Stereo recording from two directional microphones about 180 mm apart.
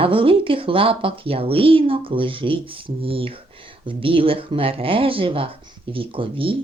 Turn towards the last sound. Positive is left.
turn(degrees=-30)  # may be behind; listen again after turning